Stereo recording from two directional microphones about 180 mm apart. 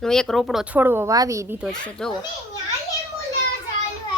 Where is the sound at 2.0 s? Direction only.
5° left (ahead or behind).